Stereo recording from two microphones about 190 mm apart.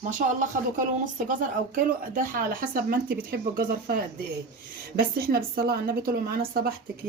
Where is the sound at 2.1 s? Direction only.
45° right (ahead or behind).